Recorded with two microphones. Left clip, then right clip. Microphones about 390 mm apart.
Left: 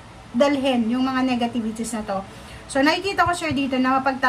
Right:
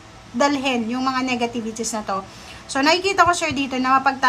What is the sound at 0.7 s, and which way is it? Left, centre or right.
Speech, centre.